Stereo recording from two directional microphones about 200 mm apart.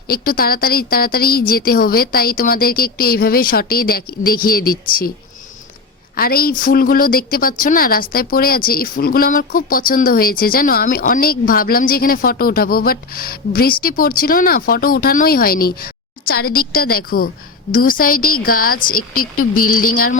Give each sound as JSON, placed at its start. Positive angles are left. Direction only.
{"t": 0.1, "sound": "speech", "side_deg": 50}
{"t": 6.1, "sound": "speech", "side_deg": 50}